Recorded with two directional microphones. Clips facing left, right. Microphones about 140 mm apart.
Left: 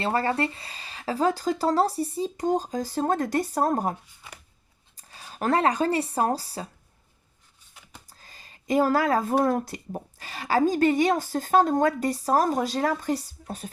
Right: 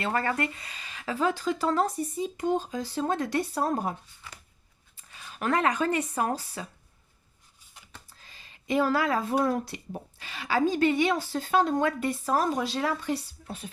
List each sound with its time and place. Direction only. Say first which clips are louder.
0.0 s speech: left 3 dB; 30° left (ahead or behind)
4.9 s speech: left 4 dB; 35° left (ahead or behind)
8.0 s speech: left 3 dB; 40° left (ahead or behind)